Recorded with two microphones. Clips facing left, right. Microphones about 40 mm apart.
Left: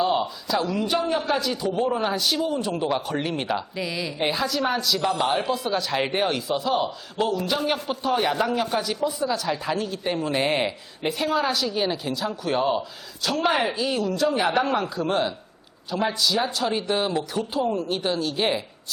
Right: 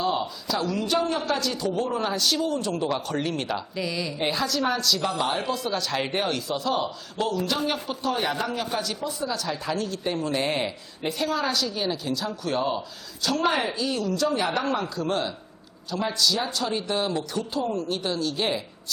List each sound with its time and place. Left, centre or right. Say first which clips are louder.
0.0 s a man's voice: left 3 dB; centre